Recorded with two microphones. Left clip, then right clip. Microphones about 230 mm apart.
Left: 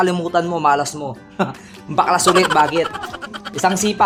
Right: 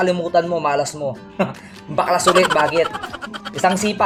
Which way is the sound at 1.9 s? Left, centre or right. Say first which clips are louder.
Left 2 dB; left.